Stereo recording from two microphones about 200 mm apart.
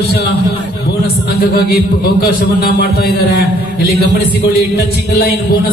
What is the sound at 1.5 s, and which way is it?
A man's voice, 50° left (ahead or behind).